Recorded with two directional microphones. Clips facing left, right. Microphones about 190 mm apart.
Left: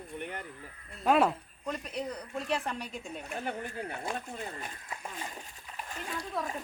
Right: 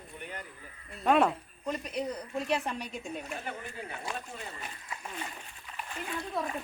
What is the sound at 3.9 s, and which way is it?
Speech, 50° left (ahead or behind).